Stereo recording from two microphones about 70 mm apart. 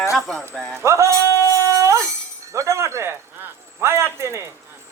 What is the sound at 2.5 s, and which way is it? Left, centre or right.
Chink, right.